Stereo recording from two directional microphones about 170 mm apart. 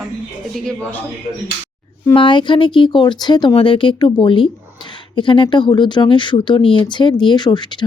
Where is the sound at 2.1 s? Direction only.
30° left (ahead or behind).